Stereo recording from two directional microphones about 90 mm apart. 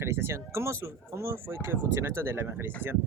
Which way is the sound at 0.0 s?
30° right (ahead or behind).